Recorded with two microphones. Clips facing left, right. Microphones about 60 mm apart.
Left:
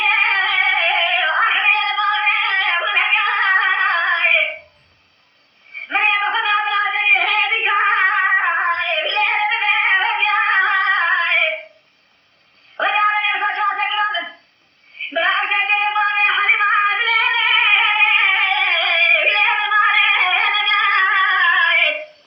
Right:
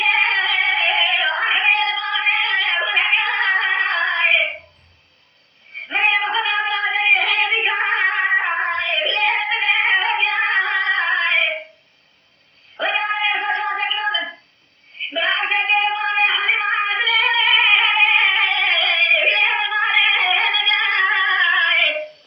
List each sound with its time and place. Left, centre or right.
0.0 s music: left
5.9 s female singing: left
12.7 s cat: left
13.4 s a sound: left
15.1 s female singing: left
15.4 s a sound: left